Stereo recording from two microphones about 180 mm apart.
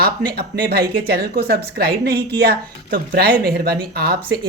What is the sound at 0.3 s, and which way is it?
A woman's voice, 60° right (ahead or behind).